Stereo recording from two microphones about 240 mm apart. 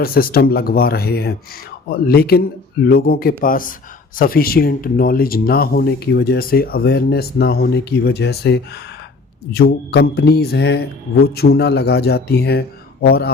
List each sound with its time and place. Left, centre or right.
0.0 s speech: left